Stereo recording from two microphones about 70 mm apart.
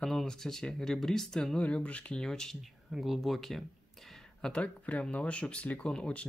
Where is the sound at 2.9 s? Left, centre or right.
Centre.